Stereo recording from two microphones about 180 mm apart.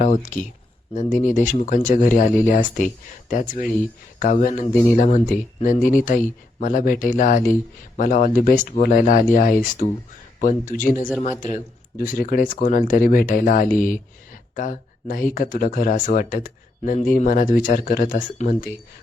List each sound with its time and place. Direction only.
0.0 s speech: 45° left (ahead or behind)